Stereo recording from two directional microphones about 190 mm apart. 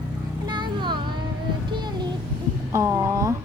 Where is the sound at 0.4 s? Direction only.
25° right (ahead or behind).